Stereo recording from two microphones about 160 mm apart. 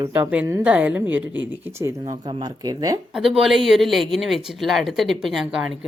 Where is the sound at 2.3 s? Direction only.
30° right (ahead or behind).